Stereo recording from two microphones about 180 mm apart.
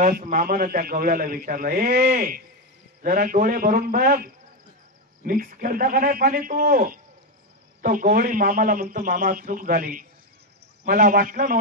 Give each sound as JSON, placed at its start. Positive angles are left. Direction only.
{"t": 0.0, "sound": "a man's voice", "side_deg": -50}